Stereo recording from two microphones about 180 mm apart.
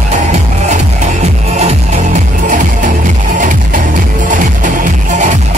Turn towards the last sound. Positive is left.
turn(degrees=-45)  # may be behind; listen again after turning